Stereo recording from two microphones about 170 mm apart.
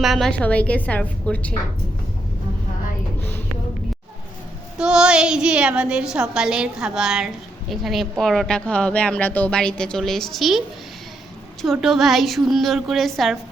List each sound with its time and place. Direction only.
0.0 s a woman's voice: centre (ahead or behind)
4.8 s a woman's voice: 5° right (ahead or behind)
11.6 s a woman's voice: centre (ahead or behind)